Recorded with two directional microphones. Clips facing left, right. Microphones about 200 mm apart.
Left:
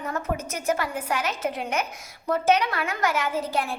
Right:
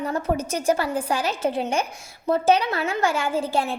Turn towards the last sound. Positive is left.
turn(degrees=-30)  # may be behind; listen again after turning